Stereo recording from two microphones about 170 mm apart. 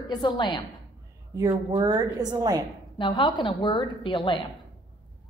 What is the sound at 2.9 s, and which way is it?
A woman's voice, 30° left (ahead or behind).